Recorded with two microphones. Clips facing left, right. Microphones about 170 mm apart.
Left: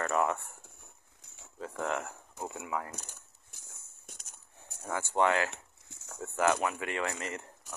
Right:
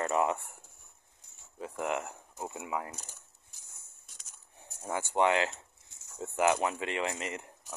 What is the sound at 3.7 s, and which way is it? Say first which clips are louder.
Walk: left 8 dB; 60° left (ahead or behind).